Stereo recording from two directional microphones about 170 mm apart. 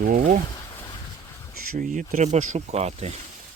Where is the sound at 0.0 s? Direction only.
55° right (ahead or behind).